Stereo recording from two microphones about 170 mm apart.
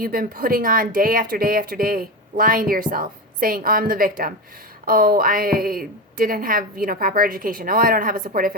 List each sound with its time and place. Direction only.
0.0 s speech: 60° right (ahead or behind)